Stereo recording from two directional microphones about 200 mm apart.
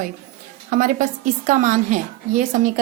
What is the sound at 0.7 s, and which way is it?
A woman's voice, 40° right (ahead or behind).